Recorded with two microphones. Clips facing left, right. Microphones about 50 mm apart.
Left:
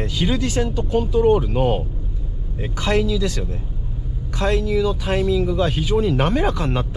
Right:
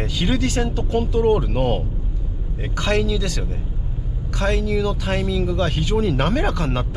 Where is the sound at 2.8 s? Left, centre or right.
Centre.